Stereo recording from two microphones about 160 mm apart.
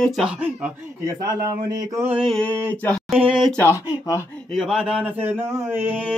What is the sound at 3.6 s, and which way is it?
Speech, 15° left (ahead or behind).